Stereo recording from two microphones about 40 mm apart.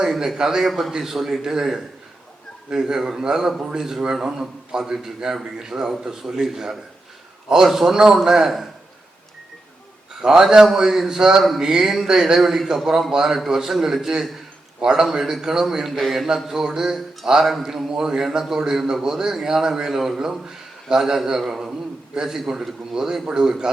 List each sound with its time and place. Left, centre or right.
0.3 s a man's voice: centre
0.7 s a man's voice: centre
0.9 s a man's voice: centre
10.2 s a man's voice: centre
14.8 s a man's voice: centre
16.5 s a man's voice: centre